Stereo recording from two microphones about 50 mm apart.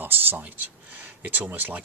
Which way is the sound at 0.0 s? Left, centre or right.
Right.